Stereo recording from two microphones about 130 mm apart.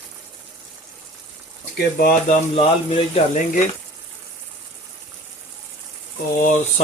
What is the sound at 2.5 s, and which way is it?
Speech, 50° left (ahead or behind).